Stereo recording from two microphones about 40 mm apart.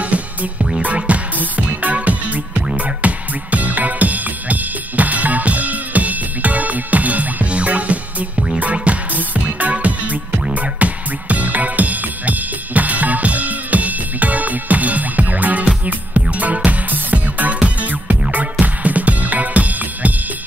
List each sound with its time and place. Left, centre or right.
0.0 s music: right